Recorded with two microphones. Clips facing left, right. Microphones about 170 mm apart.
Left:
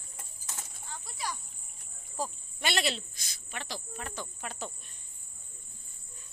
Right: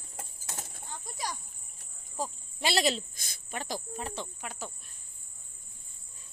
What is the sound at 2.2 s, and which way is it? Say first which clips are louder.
Cricket: right 1 dB; 25° right (ahead or behind).